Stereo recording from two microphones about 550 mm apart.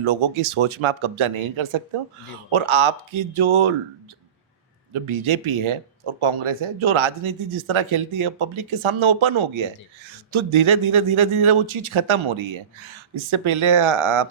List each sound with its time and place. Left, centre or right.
0.0 s speech: right
4.9 s speech: right